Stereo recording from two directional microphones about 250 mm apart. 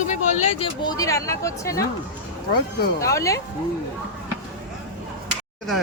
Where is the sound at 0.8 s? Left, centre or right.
Centre.